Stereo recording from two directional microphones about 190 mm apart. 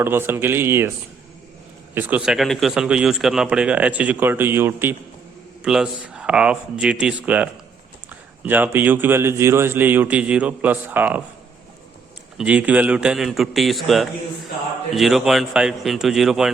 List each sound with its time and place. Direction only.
0.0 s a man's voice: 10° right (ahead or behind)
2.0 s a man's voice: 10° right (ahead or behind)
12.4 s a man's voice: 5° right (ahead or behind)